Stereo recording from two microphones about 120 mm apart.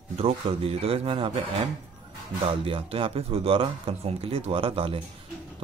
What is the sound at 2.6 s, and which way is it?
Speech, 50° right (ahead or behind).